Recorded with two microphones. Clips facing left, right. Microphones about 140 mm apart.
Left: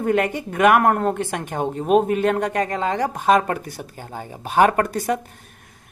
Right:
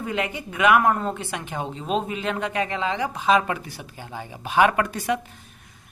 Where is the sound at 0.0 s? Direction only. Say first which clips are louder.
Left 7 dB; 50° left (ahead or behind).